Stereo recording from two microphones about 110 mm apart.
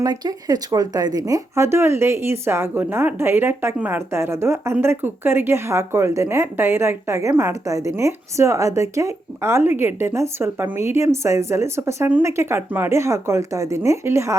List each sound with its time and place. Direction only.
0.0 s speech: 35° right (ahead or behind)